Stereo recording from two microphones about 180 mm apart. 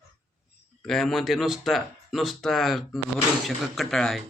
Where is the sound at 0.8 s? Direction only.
Centre (ahead or behind).